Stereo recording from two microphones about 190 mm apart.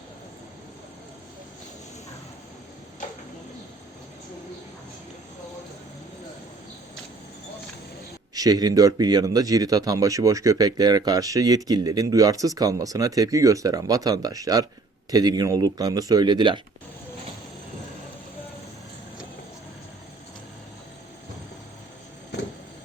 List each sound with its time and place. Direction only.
8.4 s speech: 20° right (ahead or behind)